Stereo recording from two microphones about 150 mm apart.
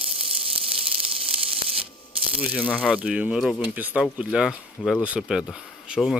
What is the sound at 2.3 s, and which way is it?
Speech, 10° right (ahead or behind).